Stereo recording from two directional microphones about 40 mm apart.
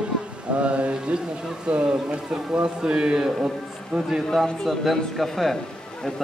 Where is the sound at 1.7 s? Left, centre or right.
Right.